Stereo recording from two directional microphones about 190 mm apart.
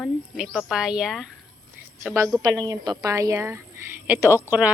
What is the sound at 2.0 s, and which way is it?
A woman's voice, 15° right (ahead or behind).